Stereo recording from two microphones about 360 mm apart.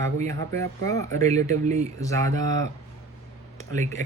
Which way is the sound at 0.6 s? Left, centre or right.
Centre.